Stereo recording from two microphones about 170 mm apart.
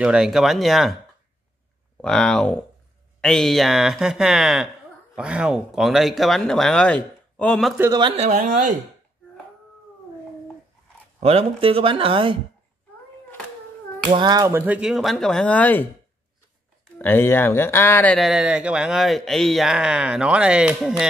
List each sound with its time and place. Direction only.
0.0 s speech: 5° right (ahead or behind)
2.0 s speech: 5° left (ahead or behind)
8.3 s speech: 50° right (ahead or behind)
11.1 s speech: 35° right (ahead or behind)
14.1 s speech: 25° right (ahead or behind); by 15.9 s 10° left (ahead or behind)
17.0 s speech: 10° left (ahead or behind)
18.3 s speech: 5° right (ahead or behind)